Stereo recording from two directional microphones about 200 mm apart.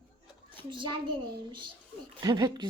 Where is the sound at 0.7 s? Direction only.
25° right (ahead or behind).